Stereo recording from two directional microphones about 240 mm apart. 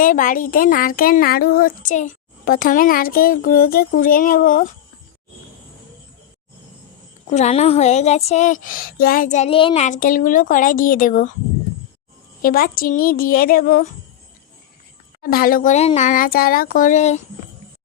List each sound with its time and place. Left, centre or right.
0.0 s speech: left
7.3 s speech: left
12.4 s speech: left
15.2 s speech: left